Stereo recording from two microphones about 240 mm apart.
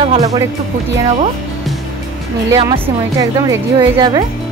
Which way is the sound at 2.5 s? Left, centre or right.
Centre.